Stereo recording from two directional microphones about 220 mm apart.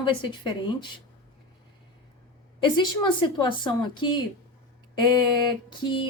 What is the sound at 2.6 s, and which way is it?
Speech, 20° left (ahead or behind).